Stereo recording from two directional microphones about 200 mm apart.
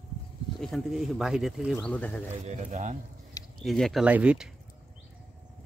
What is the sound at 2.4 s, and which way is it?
Speech, 35° right (ahead or behind).